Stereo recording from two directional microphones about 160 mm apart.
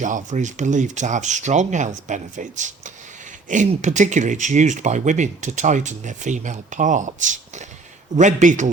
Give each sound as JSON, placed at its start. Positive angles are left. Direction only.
{"t": 0.0, "sound": "speech", "side_deg": -50}